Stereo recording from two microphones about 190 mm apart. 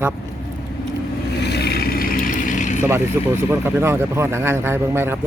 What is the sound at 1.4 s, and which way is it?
Vehicle, 60° left (ahead or behind).